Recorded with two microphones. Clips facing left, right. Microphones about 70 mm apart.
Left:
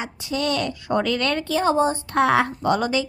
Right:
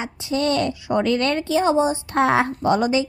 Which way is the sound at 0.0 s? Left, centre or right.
Right.